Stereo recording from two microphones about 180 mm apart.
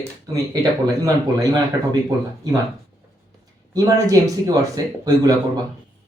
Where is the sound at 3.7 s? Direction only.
20° right (ahead or behind).